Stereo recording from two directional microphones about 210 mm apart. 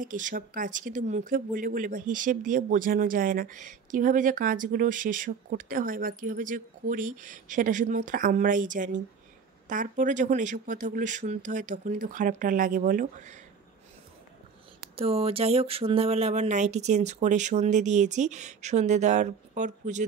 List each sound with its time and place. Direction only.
0.0 s speech: 40° right (ahead or behind)
15.0 s speech: 25° right (ahead or behind)